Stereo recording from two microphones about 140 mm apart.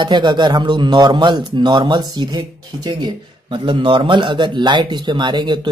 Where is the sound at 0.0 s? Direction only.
30° right (ahead or behind).